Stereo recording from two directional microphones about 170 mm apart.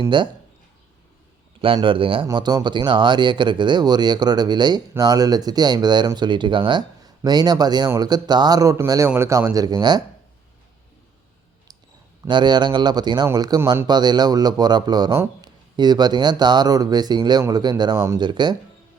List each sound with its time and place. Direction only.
0.1 s speech: 30° right (ahead or behind)
1.6 s speech: 30° right (ahead or behind)
12.3 s speech: 25° right (ahead or behind)